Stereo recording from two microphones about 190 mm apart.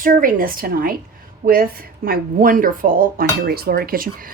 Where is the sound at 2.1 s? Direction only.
45° right (ahead or behind).